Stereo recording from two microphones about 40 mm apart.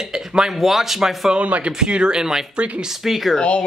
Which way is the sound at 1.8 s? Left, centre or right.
Right.